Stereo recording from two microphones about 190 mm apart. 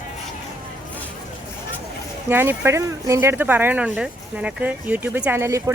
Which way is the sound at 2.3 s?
10° right (ahead or behind).